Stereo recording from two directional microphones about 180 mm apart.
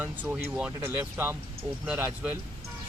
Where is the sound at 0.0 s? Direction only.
10° right (ahead or behind).